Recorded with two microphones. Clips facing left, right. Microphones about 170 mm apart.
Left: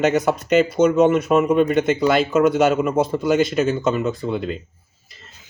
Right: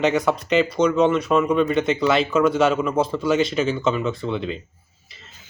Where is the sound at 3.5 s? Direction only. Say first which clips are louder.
Left 2 dB; 45° left (ahead or behind).